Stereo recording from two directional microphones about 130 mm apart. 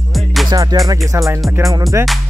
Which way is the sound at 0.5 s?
30° right (ahead or behind).